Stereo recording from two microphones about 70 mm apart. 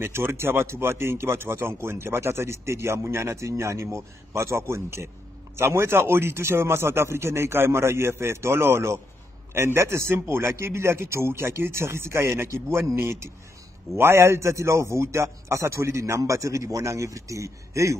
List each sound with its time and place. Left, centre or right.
0.0 s a man's voice: right